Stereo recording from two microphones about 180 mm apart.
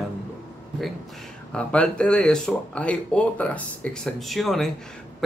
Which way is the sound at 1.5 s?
5° left (ahead or behind).